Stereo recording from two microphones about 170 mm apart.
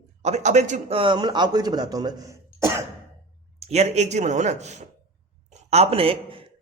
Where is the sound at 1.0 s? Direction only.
25° right (ahead or behind).